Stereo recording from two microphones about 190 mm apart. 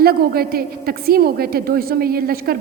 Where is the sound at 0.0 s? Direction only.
55° right (ahead or behind).